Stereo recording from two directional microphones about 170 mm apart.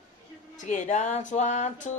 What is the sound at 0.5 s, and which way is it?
Speech, 45° left (ahead or behind).